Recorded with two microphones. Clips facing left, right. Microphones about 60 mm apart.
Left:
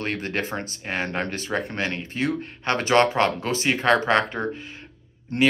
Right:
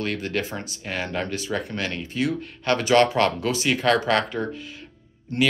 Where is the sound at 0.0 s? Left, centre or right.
Left.